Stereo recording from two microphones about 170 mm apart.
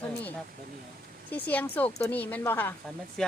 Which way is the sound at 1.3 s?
10° left (ahead or behind).